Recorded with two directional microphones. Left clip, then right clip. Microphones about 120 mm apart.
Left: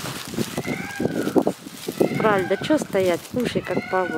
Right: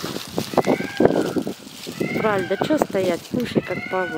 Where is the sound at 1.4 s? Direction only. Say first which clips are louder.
Left 6 dB; 55° left (ahead or behind).